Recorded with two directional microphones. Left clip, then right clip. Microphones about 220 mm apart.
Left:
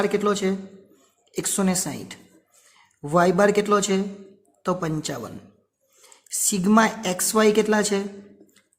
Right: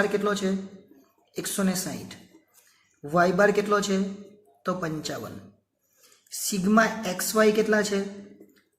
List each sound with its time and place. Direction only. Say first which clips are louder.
0.0 s a woman's voice: left 3 dB; 50° left (ahead or behind)
1.4 s a woman's voice: left 4 dB; 50° left (ahead or behind)
6.4 s a woman's voice: left 3 dB; 50° left (ahead or behind)